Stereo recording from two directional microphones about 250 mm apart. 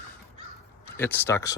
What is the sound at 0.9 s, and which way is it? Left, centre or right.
Speech, centre.